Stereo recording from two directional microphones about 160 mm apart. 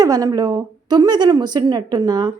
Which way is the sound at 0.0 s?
20° right (ahead or behind).